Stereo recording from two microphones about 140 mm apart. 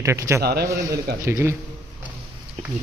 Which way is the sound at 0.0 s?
20° right (ahead or behind).